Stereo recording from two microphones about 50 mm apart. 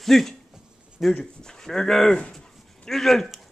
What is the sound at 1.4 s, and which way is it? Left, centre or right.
Speech, centre.